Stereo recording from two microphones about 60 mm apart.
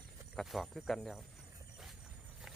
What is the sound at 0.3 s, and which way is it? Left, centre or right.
Speech, centre.